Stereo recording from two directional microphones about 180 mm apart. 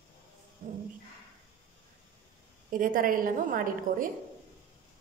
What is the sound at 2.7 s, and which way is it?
A woman's voice, 50° right (ahead or behind).